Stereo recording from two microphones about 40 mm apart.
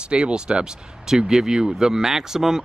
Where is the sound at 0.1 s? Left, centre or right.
Right.